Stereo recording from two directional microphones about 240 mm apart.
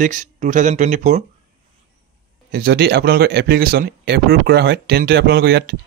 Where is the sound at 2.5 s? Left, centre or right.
Right.